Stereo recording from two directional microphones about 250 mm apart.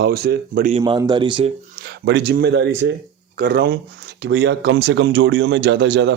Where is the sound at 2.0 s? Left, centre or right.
Right.